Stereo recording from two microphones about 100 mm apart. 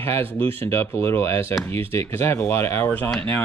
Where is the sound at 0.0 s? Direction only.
20° left (ahead or behind).